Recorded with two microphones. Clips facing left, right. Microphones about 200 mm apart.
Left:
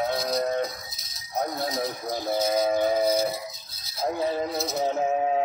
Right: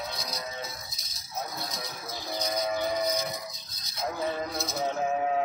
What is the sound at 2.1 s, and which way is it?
Music, 50° left (ahead or behind).